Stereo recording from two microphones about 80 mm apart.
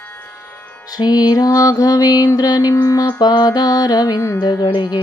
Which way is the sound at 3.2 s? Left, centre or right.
Left.